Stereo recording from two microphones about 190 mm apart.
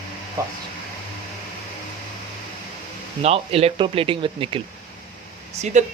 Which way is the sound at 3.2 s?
30° right (ahead or behind).